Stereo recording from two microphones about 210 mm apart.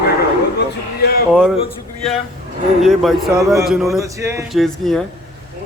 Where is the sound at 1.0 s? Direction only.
50° left (ahead or behind).